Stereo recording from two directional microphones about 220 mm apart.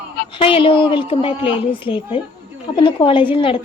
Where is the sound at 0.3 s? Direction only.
25° left (ahead or behind).